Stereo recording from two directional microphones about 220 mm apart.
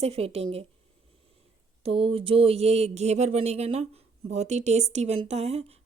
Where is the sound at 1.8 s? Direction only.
25° right (ahead or behind).